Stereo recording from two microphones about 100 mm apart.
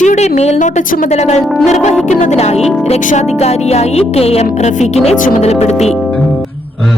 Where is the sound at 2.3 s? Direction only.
90° left.